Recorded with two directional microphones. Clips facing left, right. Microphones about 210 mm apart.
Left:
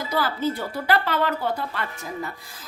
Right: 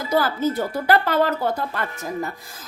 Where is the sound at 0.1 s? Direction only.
45° right (ahead or behind).